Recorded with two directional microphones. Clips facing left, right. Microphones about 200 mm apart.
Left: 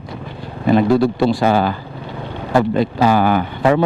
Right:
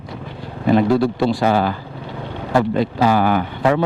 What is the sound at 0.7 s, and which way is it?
Speech, 20° left (ahead or behind).